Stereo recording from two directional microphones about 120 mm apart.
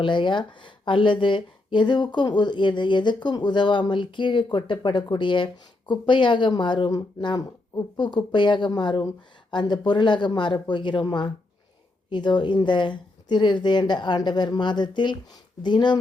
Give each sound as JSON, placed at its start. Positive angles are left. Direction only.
{"t": 0.0, "sound": "speech", "side_deg": 40}